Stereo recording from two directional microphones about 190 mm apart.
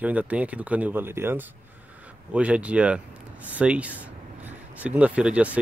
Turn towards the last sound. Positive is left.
turn(degrees=-5)  # may be behind; listen again after turning